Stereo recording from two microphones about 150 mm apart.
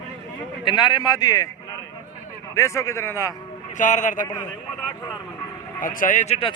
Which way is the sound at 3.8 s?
55° left (ahead or behind).